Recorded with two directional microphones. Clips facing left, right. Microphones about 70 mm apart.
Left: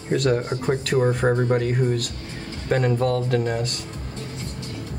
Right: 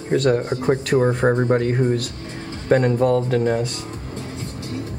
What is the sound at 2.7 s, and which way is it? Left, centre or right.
Speech, centre.